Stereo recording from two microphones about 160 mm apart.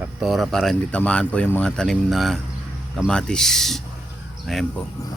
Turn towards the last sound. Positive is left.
turn(degrees=0)  # may be behind; listen again after turning